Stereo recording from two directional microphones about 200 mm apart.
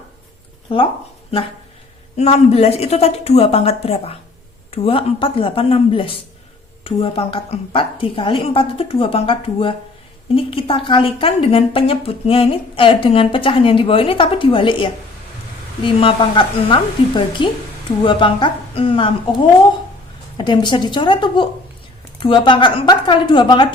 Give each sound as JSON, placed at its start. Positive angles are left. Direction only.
{"t": 0.7, "sound": "a woman's voice", "side_deg": 25}
{"t": 2.1, "sound": "a woman's voice", "side_deg": 30}